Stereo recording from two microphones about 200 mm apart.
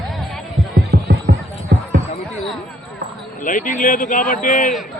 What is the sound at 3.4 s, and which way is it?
A man's voice, 40° left (ahead or behind).